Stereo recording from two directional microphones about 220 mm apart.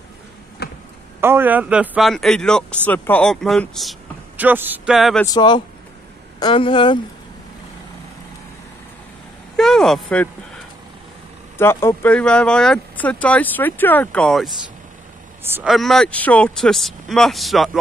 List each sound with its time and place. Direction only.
0.6 s a sound: 45° left (ahead or behind)
1.2 s speech: 10° right (ahead or behind)
5.2 s speech: 20° left (ahead or behind)
9.6 s vehicle: centre (ahead or behind)
11.5 s speech: 10° left (ahead or behind)